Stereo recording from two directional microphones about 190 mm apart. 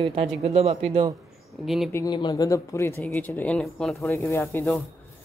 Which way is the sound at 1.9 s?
20° left (ahead or behind).